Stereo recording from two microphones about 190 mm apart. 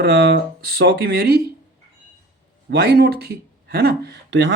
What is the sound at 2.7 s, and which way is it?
Speech, 55° right (ahead or behind).